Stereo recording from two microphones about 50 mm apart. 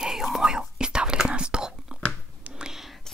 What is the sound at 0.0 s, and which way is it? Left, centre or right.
Whispering, centre.